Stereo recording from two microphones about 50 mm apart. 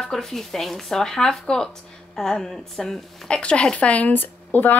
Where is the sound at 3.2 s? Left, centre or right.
Left.